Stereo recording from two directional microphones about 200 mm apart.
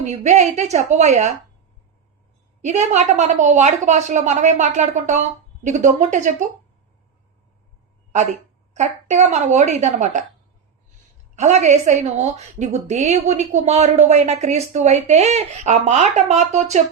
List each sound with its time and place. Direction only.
0.0 s a woman's voice: 35° right (ahead or behind)
2.6 s a woman's voice: 35° right (ahead or behind)
8.1 s a woman's voice: 35° right (ahead or behind)
11.3 s a woman's voice: 35° right (ahead or behind)